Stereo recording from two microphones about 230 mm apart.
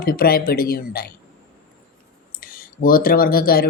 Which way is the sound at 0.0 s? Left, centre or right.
Left.